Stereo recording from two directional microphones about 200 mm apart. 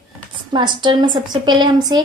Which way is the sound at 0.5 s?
25° right (ahead or behind).